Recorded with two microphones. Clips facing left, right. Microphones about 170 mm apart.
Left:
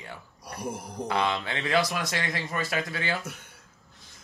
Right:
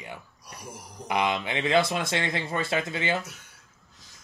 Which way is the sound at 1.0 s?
15° right (ahead or behind).